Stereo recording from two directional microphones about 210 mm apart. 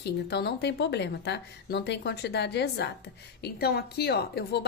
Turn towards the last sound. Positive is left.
turn(degrees=50)  # may be behind; listen again after turning